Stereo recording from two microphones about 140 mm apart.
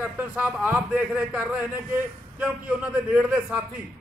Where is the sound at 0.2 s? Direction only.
15° right (ahead or behind).